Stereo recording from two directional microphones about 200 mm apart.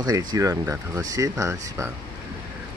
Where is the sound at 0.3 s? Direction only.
15° right (ahead or behind).